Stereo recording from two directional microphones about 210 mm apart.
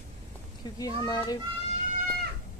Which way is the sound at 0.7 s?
15° left (ahead or behind).